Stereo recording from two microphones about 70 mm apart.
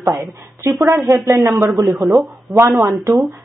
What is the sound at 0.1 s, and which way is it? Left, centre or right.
Speech, right.